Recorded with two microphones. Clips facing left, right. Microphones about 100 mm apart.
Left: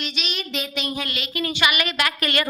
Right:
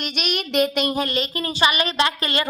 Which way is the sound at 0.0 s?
55° right (ahead or behind).